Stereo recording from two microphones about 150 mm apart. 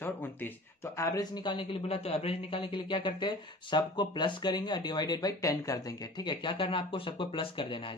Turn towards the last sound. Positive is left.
turn(degrees=35)  # may be behind; listen again after turning